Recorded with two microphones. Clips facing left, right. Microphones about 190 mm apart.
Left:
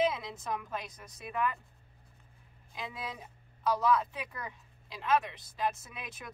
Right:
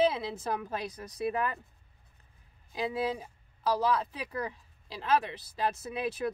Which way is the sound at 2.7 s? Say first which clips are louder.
Right 10 dB; 30° right (ahead or behind).